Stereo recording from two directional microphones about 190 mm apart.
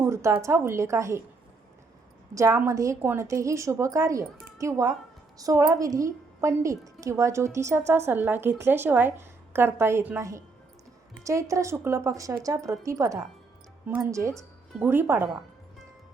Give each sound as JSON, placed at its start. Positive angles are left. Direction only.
{"t": 0.0, "sound": "a woman's voice", "side_deg": -15}
{"t": 2.3, "sound": "a woman's voice", "side_deg": -15}